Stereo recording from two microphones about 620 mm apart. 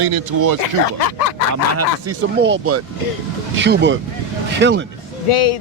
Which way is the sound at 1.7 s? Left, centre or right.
Centre.